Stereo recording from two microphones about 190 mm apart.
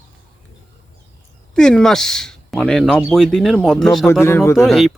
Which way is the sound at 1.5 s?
5° left (ahead or behind).